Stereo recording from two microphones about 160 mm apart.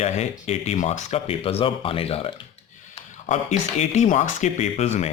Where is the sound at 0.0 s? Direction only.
40° left (ahead or behind).